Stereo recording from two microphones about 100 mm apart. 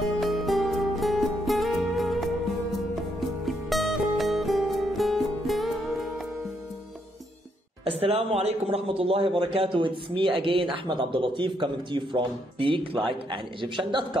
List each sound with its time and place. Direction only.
0.0 s music: centre (ahead or behind)
7.8 s a man's voice: 70° right (ahead or behind)